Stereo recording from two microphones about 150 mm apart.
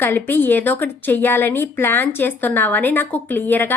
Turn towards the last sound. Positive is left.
turn(degrees=15)  # may be behind; listen again after turning